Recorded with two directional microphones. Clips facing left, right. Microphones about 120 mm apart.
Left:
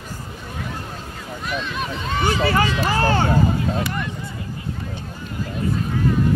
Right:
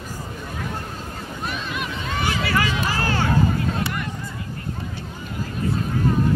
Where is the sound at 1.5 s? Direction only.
35° left (ahead or behind).